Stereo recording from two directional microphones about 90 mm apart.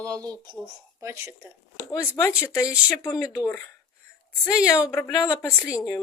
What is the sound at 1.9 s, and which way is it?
Speech, 30° left (ahead or behind).